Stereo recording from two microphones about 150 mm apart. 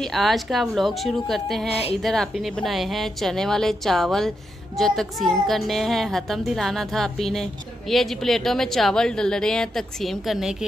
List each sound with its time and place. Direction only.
0.0 s a woman's voice: centre (ahead or behind)
1.7 s speech: 40° left (ahead or behind)
2.0 s a woman's voice: centre (ahead or behind)